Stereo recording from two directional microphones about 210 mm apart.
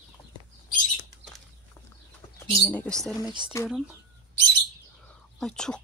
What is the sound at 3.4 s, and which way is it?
Speech, 20° right (ahead or behind).